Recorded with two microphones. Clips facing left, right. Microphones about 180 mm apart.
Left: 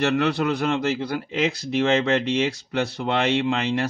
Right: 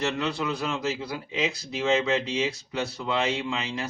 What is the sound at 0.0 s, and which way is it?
Speech, 75° left (ahead or behind).